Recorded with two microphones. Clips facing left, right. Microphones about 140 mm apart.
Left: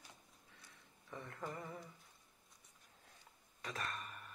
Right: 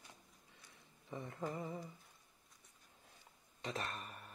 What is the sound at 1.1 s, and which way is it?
Speech, 15° right (ahead or behind).